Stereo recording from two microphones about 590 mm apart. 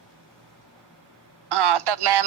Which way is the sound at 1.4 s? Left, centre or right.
Right.